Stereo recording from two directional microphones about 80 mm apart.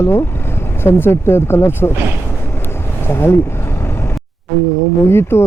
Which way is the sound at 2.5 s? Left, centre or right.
Left.